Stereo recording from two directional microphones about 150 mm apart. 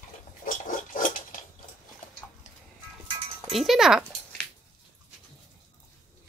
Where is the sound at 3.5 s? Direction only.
Centre (ahead or behind).